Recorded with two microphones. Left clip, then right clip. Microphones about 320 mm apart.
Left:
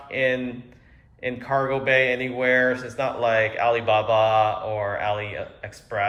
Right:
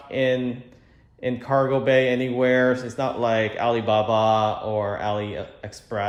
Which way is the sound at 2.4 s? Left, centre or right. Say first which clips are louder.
Even; centre.